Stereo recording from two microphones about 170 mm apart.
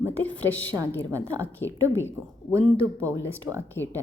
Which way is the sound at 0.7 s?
15° right (ahead or behind).